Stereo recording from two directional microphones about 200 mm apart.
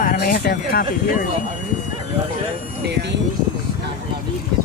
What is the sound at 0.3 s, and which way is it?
Speech, 50° left (ahead or behind).